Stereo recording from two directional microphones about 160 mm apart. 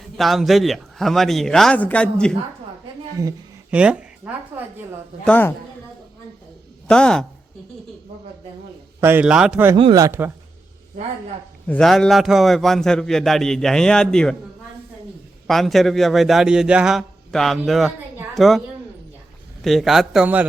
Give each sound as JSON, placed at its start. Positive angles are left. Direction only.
{"t": 0.2, "sound": "a man's voice", "side_deg": 0}
{"t": 3.7, "sound": "a man's voice", "side_deg": -5}
{"t": 5.2, "sound": "a man's voice", "side_deg": 10}
{"t": 6.8, "sound": "speech", "side_deg": 5}
{"t": 9.0, "sound": "a man's voice", "side_deg": -15}
{"t": 9.7, "sound": "speech", "side_deg": -25}
{"t": 11.6, "sound": "a man's voice", "side_deg": 5}
{"t": 15.4, "sound": "a man's voice", "side_deg": 0}
{"t": 19.6, "sound": "a man's voice", "side_deg": 0}